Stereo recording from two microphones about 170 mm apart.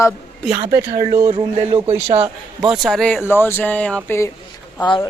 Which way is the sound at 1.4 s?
35° right (ahead or behind).